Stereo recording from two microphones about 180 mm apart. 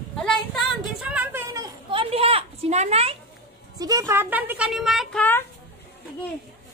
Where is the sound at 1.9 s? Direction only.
30° right (ahead or behind).